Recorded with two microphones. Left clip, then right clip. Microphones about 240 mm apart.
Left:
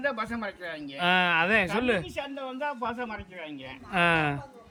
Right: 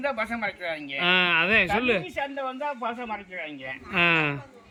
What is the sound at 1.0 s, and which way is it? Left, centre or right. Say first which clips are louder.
Speech: right 2 dB; centre.